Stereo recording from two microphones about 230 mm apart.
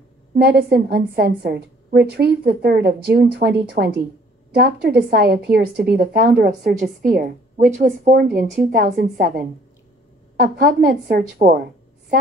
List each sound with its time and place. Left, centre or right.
0.4 s a woman's voice: right